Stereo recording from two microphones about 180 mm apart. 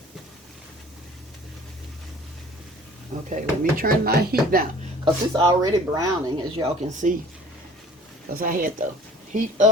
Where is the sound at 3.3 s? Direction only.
55° right (ahead or behind).